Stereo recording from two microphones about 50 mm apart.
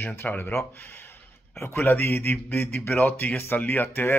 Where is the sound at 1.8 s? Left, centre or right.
Left.